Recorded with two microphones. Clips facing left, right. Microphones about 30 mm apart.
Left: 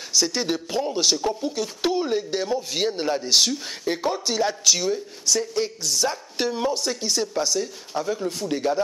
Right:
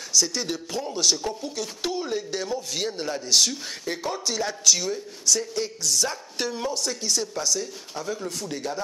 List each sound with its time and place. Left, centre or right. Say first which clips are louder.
0.1 s speech: left 2 dB; centre